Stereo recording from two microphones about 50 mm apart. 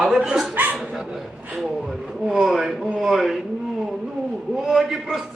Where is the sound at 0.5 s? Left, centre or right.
Right.